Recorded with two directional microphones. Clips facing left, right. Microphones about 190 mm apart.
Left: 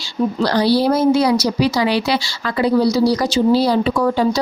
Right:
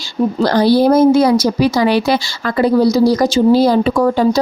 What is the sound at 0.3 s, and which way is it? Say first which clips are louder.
A woman's voice: right 4 dB; 50° right (ahead or behind).